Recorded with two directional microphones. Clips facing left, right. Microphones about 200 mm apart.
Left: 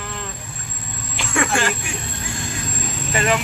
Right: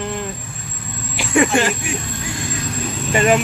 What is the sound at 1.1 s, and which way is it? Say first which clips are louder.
Speech: right 6 dB; 15° right (ahead or behind).